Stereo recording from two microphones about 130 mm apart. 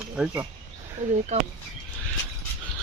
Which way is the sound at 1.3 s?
60° right (ahead or behind).